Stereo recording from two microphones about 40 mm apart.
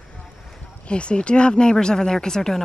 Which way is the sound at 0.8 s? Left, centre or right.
Left.